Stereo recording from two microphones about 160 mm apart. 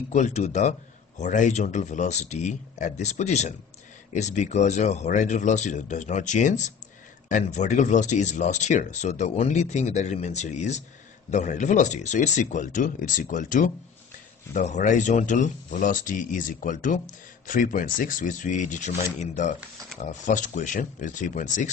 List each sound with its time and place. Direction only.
0.1 s speech: 45° left (ahead or behind)